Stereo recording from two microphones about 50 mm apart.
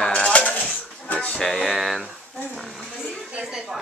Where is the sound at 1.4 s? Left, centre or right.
Centre.